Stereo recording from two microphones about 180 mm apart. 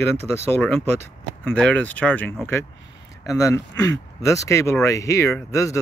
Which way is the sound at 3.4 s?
15° left (ahead or behind).